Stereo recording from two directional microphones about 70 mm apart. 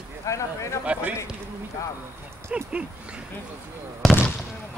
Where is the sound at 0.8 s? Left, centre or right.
Right.